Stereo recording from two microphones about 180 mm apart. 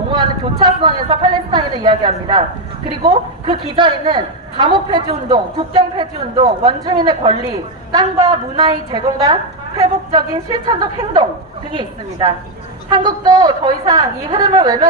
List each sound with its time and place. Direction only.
0.1 s a woman's voice: 25° right (ahead or behind)